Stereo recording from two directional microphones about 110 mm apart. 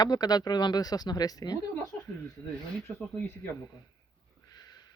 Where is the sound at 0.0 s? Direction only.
35° left (ahead or behind).